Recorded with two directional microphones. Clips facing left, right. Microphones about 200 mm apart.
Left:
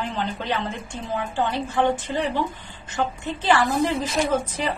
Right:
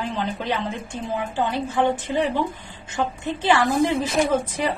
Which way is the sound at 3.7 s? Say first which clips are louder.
Right 2 dB; 50° right (ahead or behind).